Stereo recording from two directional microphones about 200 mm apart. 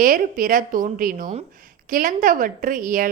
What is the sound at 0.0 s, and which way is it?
A woman's voice, 45° right (ahead or behind).